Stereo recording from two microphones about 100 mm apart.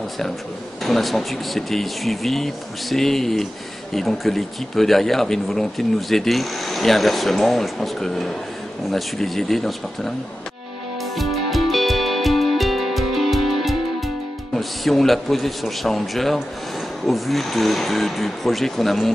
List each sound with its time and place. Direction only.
0.8 s speech: centre (ahead or behind)
11.1 s music: centre (ahead or behind)
17.0 s speech: centre (ahead or behind)